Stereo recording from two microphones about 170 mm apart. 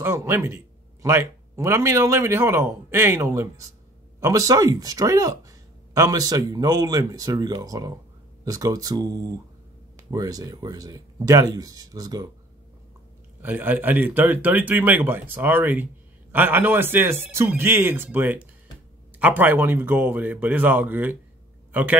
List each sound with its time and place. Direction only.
0.0 s speech: 15° right (ahead or behind)
13.4 s speech: 10° right (ahead or behind)